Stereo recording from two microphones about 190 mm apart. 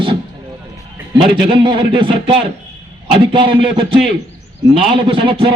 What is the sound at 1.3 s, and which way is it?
A man's voice, 25° right (ahead or behind).